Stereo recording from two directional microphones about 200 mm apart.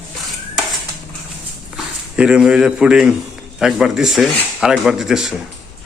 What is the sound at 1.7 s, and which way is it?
Speech, 5° right (ahead or behind).